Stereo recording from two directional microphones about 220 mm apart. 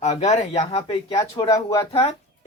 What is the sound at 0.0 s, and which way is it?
Speech, 30° left (ahead or behind).